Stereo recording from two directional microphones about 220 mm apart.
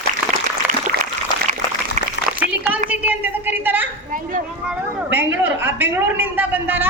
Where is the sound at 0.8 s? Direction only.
35° right (ahead or behind).